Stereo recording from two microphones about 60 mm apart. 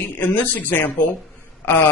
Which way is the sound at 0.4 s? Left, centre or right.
Left.